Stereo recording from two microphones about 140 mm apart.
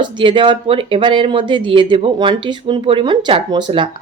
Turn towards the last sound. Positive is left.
turn(degrees=-35)  # may be behind; listen again after turning